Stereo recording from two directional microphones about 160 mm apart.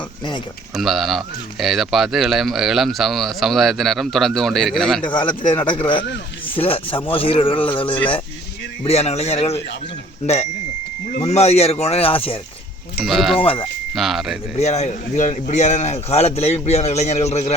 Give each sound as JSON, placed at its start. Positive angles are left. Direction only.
{"t": 0.8, "sound": "speech", "side_deg": 0}
{"t": 5.0, "sound": "a man's voice", "side_deg": 30}
{"t": 11.2, "sound": "speech", "side_deg": 40}
{"t": 13.1, "sound": "speech", "side_deg": 0}
{"t": 13.4, "sound": "speech", "side_deg": 35}
{"t": 13.9, "sound": "speech", "side_deg": 0}
{"t": 14.6, "sound": "speech", "side_deg": 45}